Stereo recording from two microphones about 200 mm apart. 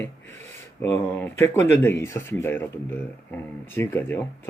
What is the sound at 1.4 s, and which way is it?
Speech, 35° right (ahead or behind).